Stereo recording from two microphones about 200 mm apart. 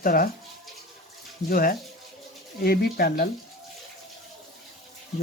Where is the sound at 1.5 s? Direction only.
45° left (ahead or behind).